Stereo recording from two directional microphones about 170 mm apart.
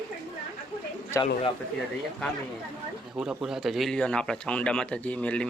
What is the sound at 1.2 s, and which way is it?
Speech, 30° left (ahead or behind).